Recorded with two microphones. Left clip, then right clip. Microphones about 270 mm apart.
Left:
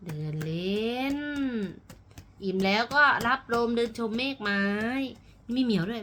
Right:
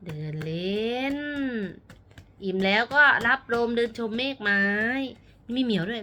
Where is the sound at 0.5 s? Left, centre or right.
Left.